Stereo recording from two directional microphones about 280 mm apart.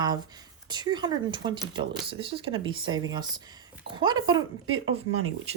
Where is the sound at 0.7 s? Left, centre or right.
Centre.